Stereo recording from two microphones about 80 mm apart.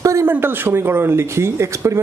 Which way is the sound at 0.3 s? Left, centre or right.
Right.